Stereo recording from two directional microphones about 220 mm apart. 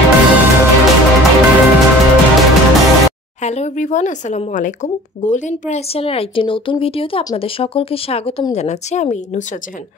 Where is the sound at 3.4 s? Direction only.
30° left (ahead or behind).